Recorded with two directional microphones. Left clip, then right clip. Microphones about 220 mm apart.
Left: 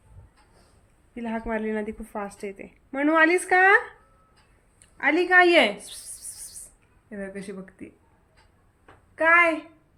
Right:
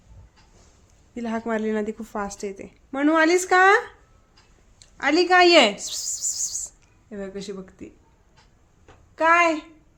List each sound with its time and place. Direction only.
1.1 s speech: 30° right (ahead or behind)
4.9 s speech: 25° right (ahead or behind)
7.1 s speech: 10° right (ahead or behind)
9.1 s speech: 10° right (ahead or behind)